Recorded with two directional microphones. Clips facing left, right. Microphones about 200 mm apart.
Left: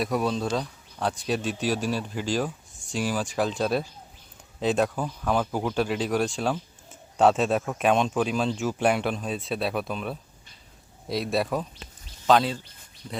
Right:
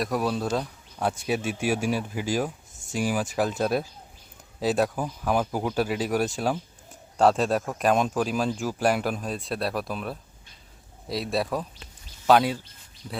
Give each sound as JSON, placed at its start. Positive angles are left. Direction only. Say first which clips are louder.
{"t": 0.0, "sound": "speech", "louder": "even", "side_deg": 0}
{"t": 2.7, "sound": "a sound", "louder": "right 1 dB", "side_deg": -20}
{"t": 3.1, "sound": "speech", "louder": "right 1 dB", "side_deg": -10}